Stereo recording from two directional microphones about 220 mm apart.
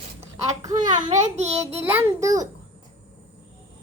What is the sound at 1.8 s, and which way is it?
Speech, 10° right (ahead or behind).